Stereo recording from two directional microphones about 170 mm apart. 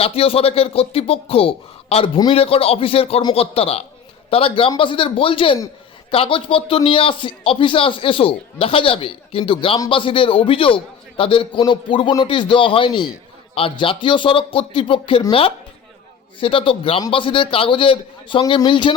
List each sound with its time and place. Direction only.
0.0 s a man's voice: 35° left (ahead or behind)